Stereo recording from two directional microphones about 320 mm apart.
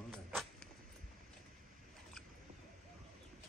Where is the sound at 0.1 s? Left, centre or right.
Centre.